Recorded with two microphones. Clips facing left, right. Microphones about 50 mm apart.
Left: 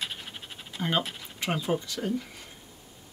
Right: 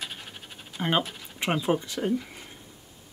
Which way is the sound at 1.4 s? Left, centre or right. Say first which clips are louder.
Right 3 dB; right.